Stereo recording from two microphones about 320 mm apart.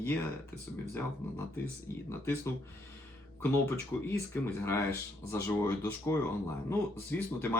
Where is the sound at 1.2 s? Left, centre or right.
Centre.